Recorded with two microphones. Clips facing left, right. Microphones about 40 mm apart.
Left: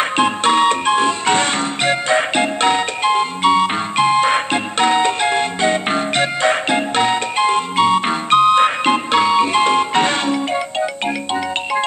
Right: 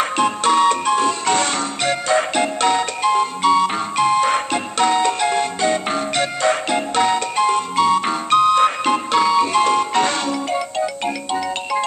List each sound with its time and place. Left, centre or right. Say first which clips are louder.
0.2 s music: left 1 dB; left